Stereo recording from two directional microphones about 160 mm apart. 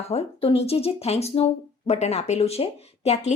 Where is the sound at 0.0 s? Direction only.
40° left (ahead or behind).